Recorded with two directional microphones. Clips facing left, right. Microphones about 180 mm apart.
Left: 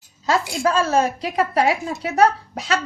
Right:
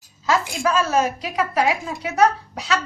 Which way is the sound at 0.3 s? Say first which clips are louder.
Left 1 dB; 35° left (ahead or behind).